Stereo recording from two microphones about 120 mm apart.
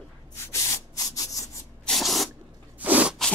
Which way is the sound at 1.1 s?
30° left (ahead or behind).